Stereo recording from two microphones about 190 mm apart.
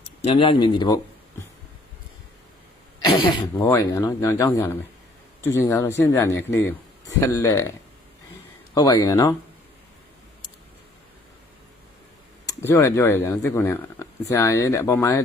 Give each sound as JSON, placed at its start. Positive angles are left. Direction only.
{"t": 0.3, "sound": "speech", "side_deg": 25}
{"t": 3.1, "sound": "speech", "side_deg": 15}
{"t": 8.7, "sound": "speech", "side_deg": 20}
{"t": 12.5, "sound": "speech", "side_deg": 15}